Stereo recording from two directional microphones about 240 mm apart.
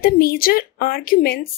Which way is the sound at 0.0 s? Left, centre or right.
Left.